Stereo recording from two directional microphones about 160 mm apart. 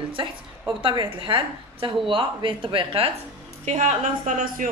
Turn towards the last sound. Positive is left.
turn(degrees=-50)  # may be behind; listen again after turning